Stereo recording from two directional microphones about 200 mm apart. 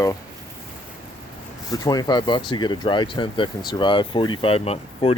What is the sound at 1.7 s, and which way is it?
Speech, 20° left (ahead or behind).